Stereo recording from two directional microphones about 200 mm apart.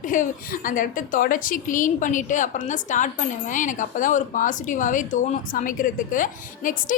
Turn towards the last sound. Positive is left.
turn(degrees=40)  # may be behind; listen again after turning